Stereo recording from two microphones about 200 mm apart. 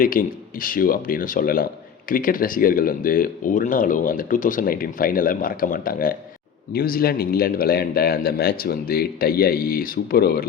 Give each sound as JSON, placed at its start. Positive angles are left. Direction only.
{"t": 0.0, "sound": "speech", "side_deg": 45}